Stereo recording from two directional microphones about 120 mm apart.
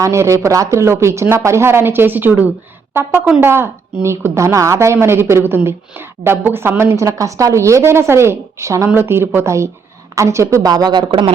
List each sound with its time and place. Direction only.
0.0 s a woman's voice: 25° right (ahead or behind); by 11.3 s 40° right (ahead or behind)